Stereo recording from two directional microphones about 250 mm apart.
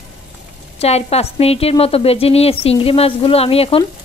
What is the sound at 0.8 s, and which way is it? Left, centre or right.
A woman's voice, left.